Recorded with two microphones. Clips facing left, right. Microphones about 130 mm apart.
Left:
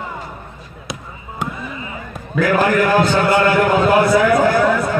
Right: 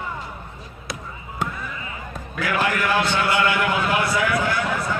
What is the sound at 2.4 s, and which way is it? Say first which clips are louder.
A man's voice: left 8 dB; 40° left (ahead or behind).